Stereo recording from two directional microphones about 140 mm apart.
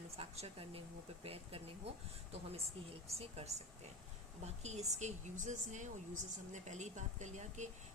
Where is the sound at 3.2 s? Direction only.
45° right (ahead or behind).